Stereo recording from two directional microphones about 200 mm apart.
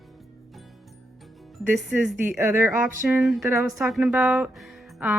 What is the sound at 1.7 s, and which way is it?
Speech, centre (ahead or behind).